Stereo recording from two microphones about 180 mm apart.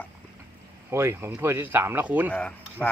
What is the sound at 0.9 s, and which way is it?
Speech, 15° right (ahead or behind).